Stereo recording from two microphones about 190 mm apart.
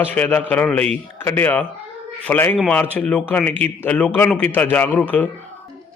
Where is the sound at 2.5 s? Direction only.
5° right (ahead or behind).